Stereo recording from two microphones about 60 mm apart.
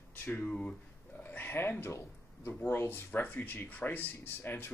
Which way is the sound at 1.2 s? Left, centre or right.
Left.